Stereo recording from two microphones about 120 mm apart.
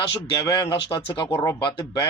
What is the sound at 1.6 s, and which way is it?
Speech, 40° left (ahead or behind).